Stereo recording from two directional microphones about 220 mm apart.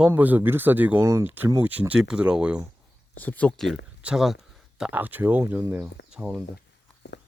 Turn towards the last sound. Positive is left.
turn(degrees=-5)  # may be behind; listen again after turning